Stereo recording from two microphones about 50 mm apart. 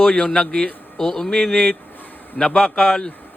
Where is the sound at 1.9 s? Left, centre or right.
Left.